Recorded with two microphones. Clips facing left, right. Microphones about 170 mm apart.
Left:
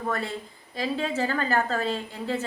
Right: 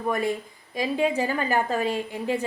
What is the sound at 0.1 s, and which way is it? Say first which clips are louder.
A woman's voice: right 7 dB; 15° right (ahead or behind).